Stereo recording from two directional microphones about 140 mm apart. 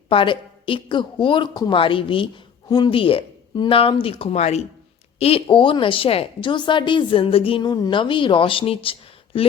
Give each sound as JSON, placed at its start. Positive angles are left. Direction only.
{"t": 0.1, "sound": "speech", "side_deg": 40}
{"t": 5.2, "sound": "speech", "side_deg": 40}